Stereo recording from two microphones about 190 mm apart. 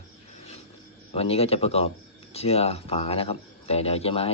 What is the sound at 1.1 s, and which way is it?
Speech, 30° left (ahead or behind).